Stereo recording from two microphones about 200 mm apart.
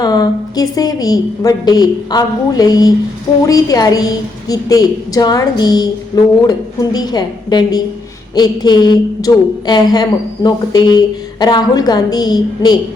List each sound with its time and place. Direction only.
0.0 s a woman's voice: 20° left (ahead or behind)